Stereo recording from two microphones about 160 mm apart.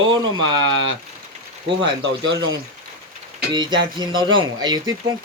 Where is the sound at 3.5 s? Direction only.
25° right (ahead or behind).